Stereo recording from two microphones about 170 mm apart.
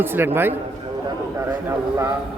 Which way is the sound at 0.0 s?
15° right (ahead or behind).